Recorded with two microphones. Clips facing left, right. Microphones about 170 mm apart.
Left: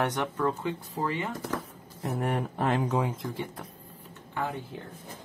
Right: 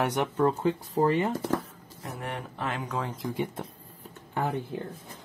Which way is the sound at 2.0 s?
45° left (ahead or behind).